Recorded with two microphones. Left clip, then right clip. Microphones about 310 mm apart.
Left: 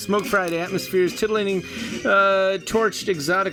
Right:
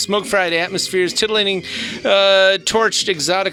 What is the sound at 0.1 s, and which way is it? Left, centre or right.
Speech, right.